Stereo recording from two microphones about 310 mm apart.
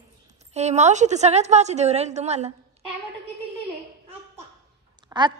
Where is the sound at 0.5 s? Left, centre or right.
Right.